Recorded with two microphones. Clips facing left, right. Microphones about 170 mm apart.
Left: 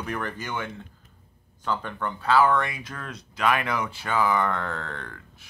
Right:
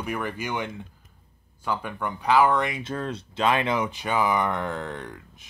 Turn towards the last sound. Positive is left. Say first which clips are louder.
# right 3 dB
turn(degrees=-15)  # may be behind; listen again after turning